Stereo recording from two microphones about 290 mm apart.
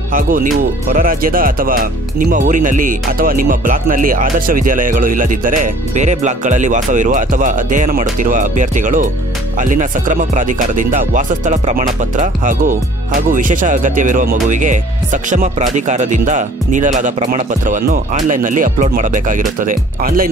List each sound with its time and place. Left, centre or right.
0.1 s speech: right